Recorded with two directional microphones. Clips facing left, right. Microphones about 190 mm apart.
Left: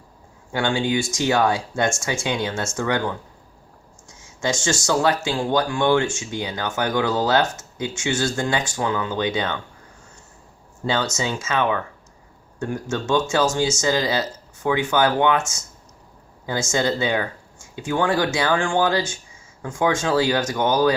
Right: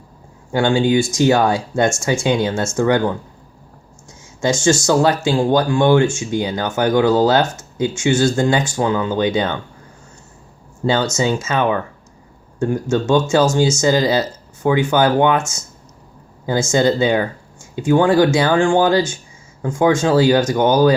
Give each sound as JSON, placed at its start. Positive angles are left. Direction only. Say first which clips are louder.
{"t": 0.5, "sound": "speech", "louder": "right 7 dB", "side_deg": -40}
{"t": 4.4, "sound": "speech", "louder": "right 8 dB", "side_deg": -40}
{"t": 11.2, "sound": "speech", "louder": "right 5 dB", "side_deg": -45}
{"t": 12.9, "sound": "speech", "louder": "right 6 dB", "side_deg": -40}
{"t": 16.5, "sound": "speech", "louder": "right 7 dB", "side_deg": -40}